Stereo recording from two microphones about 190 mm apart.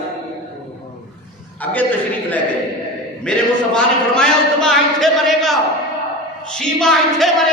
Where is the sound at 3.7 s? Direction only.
5° left (ahead or behind).